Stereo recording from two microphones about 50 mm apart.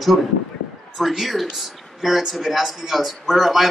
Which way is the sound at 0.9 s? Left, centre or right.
Centre.